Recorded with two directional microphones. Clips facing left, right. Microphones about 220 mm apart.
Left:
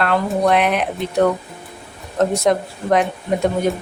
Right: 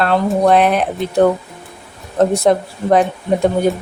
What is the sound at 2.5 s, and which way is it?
Speech, 35° right (ahead or behind).